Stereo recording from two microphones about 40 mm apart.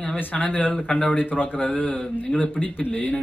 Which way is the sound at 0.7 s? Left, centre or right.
Left.